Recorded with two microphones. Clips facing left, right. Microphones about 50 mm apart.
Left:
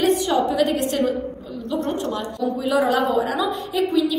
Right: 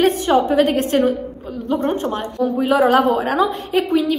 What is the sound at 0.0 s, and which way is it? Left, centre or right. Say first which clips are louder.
A woman's voice: right 3 dB; right.